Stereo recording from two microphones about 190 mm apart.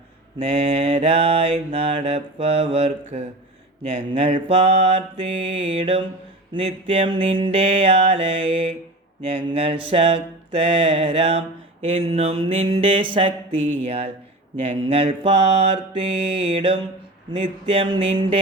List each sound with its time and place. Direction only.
0.3 s mantra: 35° right (ahead or behind)